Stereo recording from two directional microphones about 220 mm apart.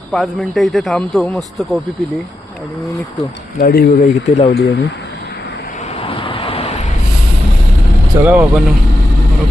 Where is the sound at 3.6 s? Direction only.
45° left (ahead or behind).